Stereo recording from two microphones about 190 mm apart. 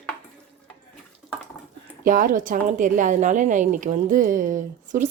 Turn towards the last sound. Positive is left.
turn(degrees=-40)  # may be behind; listen again after turning